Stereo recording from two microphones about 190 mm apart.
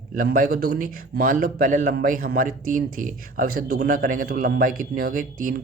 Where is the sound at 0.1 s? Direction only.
50° right (ahead or behind).